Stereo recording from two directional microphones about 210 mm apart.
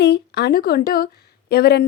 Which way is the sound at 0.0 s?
55° left (ahead or behind).